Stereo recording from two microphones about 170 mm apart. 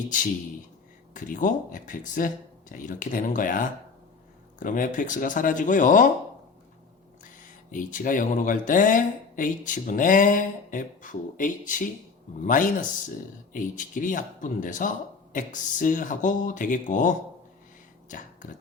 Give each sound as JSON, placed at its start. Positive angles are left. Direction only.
{"t": 1.1, "sound": "speech", "side_deg": 50}
{"t": 7.7, "sound": "speech", "side_deg": 50}